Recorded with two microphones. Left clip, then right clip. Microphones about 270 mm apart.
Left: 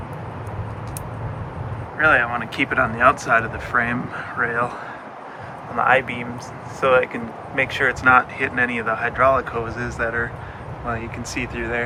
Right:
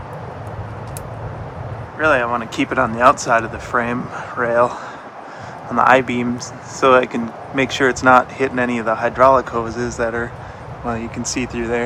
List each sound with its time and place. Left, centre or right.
2.0 s speech: centre